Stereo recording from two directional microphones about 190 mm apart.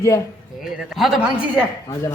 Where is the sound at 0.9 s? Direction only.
Centre (ahead or behind).